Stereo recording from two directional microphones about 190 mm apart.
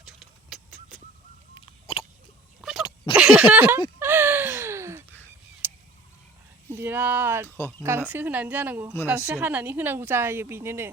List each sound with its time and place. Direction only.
0.0 s bird: centre (ahead or behind)
1.5 s a sound: 30° left (ahead or behind)
2.6 s dog: centre (ahead or behind)
3.2 s speech: 5° right (ahead or behind)
4.0 s gasp: 10° right (ahead or behind)
5.6 s a sound: 10° right (ahead or behind)
6.7 s speech: 10° right (ahead or behind)
7.4 s speech: 10° left (ahead or behind)
7.8 s speech: 15° right (ahead or behind)